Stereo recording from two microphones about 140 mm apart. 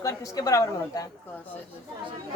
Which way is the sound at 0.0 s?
25° left (ahead or behind).